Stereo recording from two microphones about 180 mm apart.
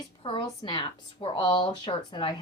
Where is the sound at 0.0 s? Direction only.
25° left (ahead or behind).